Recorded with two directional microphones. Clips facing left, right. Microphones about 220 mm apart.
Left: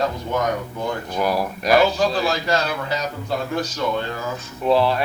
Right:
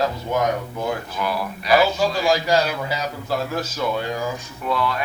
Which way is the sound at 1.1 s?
40° left (ahead or behind).